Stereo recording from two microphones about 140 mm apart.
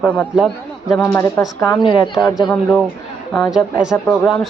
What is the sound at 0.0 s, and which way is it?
Speech, 10° left (ahead or behind).